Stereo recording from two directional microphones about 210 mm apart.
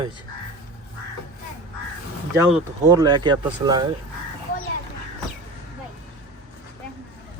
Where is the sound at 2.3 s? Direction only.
15° right (ahead or behind).